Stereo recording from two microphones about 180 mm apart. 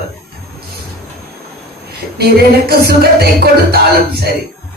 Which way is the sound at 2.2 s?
60° right (ahead or behind).